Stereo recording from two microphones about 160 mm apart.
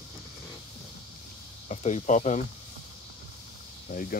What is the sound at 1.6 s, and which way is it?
Speech, 45° left (ahead or behind).